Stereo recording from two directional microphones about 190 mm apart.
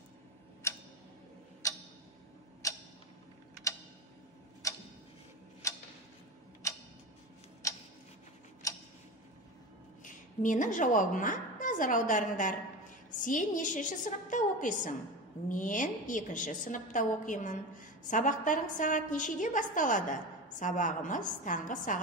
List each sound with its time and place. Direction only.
0.6 s tick-tock: 15° left (ahead or behind)
4.6 s tick-tock: 15° left (ahead or behind)
8.6 s tick-tock: 15° left (ahead or behind)
10.0 s a woman's voice: 45° left (ahead or behind)